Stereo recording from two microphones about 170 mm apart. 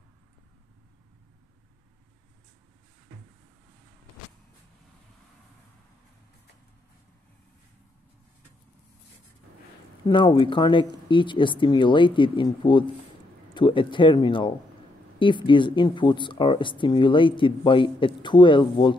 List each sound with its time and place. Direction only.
10.0 s speech: 30° left (ahead or behind)